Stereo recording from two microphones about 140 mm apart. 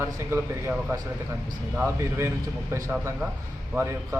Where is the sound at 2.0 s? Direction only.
20° right (ahead or behind).